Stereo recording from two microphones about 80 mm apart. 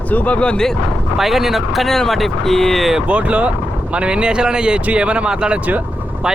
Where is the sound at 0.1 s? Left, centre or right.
Centre.